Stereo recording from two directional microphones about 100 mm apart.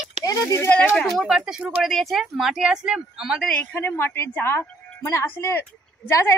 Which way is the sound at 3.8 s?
25° left (ahead or behind).